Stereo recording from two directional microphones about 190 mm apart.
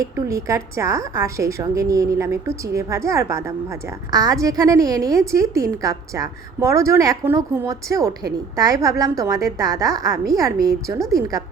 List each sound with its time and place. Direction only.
0.0 s a woman's voice: 15° right (ahead or behind)